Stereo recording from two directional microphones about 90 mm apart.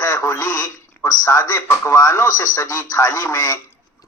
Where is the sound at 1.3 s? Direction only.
40° left (ahead or behind).